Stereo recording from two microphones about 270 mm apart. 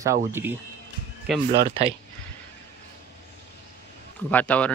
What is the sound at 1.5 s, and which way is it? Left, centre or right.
Speech, right.